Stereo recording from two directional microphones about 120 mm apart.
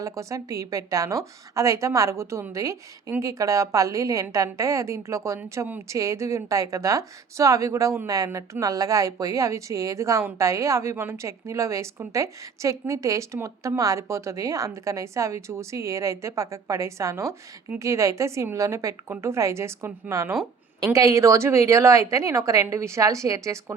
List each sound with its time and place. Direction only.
0.0 s a woman's voice: 25° right (ahead or behind)
5.9 s a woman's voice: 25° right (ahead or behind)